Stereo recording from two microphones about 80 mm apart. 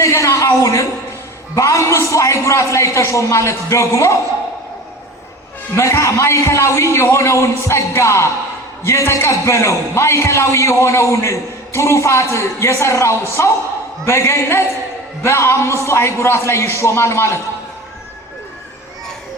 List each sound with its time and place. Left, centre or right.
0.0 s a sound: left
1.5 s a man's voice: left
5.7 s a man's voice: left